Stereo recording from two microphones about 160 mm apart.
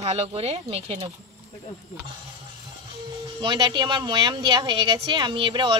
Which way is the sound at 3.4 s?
30° right (ahead or behind).